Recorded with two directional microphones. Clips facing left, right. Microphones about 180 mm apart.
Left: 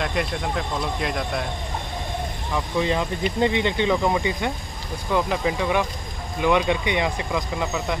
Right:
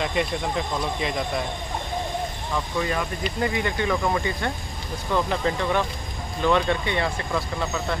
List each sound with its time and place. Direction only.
0.0 s speech: centre (ahead or behind)
2.5 s speech: 20° left (ahead or behind)